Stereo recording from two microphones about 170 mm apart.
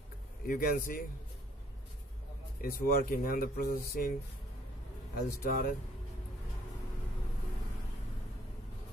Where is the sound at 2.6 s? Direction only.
60° left (ahead or behind).